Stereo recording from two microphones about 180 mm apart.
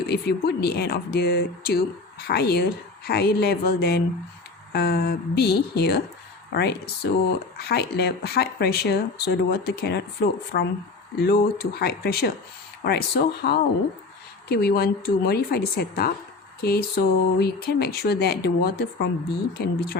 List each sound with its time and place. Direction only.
0.1 s speech: 65° left (ahead or behind)